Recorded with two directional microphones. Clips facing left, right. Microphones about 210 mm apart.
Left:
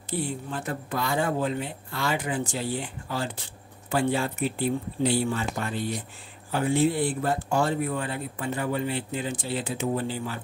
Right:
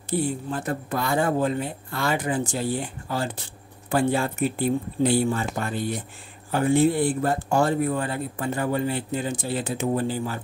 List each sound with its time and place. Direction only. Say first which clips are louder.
0.5 s speech: right 4 dB; 45° right (ahead or behind)